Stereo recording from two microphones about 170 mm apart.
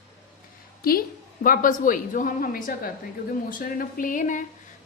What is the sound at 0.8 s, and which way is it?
A woman's voice, 60° left (ahead or behind).